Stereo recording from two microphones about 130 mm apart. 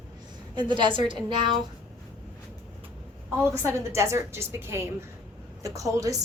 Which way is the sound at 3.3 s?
20° right (ahead or behind).